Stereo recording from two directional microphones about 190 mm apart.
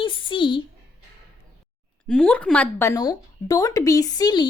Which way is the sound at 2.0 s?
5° left (ahead or behind).